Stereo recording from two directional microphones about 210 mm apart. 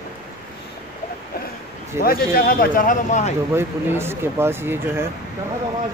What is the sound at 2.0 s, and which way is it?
A man's voice, 45° left (ahead or behind).